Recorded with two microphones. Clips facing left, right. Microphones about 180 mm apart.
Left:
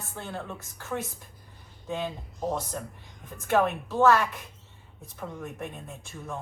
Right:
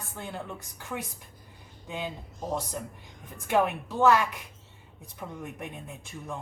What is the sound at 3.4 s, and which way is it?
Speech, 15° right (ahead or behind).